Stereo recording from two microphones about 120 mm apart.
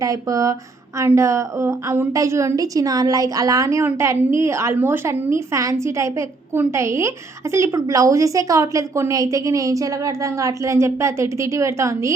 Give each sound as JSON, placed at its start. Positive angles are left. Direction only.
{"t": 0.0, "sound": "a woman's voice", "side_deg": -30}